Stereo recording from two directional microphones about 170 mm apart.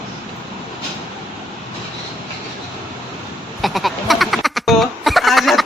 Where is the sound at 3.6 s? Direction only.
Centre (ahead or behind).